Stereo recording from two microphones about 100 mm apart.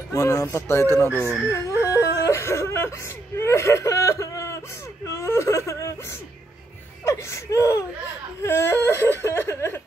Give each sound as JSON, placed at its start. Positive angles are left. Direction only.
{"t": 0.1, "sound": "speech", "side_deg": 30}
{"t": 1.8, "sound": "a sound", "side_deg": 30}
{"t": 3.3, "sound": "whimper", "side_deg": 25}
{"t": 7.1, "sound": "whimper", "side_deg": 30}